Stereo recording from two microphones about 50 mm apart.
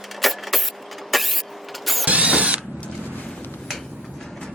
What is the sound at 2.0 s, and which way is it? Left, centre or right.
Mechanisms, right.